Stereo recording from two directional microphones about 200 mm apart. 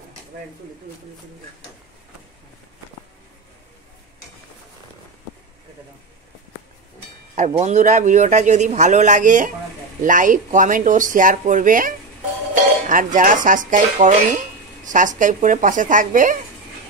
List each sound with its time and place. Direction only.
7.3 s a man's voice: 35° right (ahead or behind)